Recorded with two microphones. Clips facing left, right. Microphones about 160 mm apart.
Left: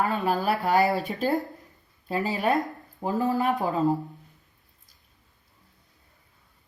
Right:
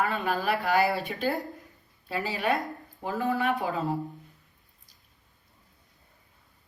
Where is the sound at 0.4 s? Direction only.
40° left (ahead or behind).